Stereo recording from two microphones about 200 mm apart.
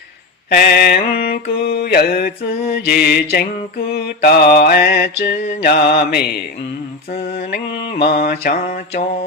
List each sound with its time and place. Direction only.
0.5 s mantra: 50° left (ahead or behind)
8.3 s mantra: 35° left (ahead or behind)